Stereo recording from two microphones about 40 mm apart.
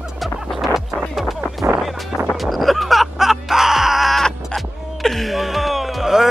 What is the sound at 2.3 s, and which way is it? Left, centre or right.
Music, centre.